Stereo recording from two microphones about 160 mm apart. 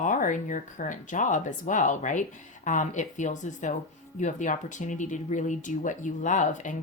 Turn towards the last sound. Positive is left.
turn(degrees=50)  # may be behind; listen again after turning